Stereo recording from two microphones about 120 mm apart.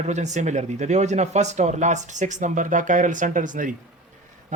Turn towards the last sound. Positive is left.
turn(degrees=-90)